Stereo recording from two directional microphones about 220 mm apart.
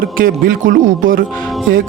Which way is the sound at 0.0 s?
40° right (ahead or behind).